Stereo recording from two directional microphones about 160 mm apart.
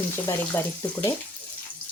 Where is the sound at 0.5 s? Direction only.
10° left (ahead or behind).